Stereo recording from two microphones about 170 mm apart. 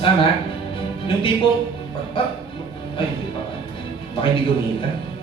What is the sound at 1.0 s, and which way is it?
Speech, 30° left (ahead or behind).